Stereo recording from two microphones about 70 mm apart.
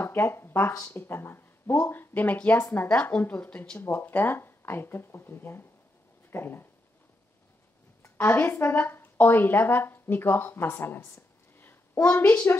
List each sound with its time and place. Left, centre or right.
0.0 s a woman's voice: left
8.2 s a woman's voice: left